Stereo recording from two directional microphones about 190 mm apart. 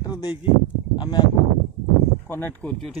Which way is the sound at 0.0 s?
20° left (ahead or behind).